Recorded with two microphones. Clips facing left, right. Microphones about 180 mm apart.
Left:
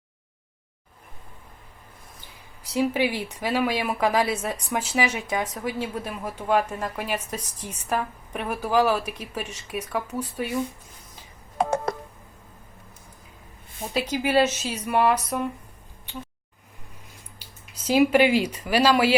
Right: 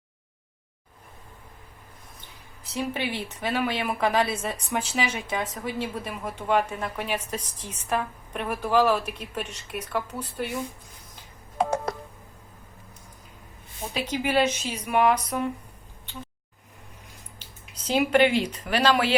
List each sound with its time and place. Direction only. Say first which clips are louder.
2.7 s a woman's voice: left 6 dB; 10° left (ahead or behind)
11.5 s telephone dialing: left 1 dB; 50° left (ahead or behind)
13.9 s a woman's voice: left 3 dB; 5° left (ahead or behind)
17.8 s a woman's voice: left 2 dB; 5° left (ahead or behind)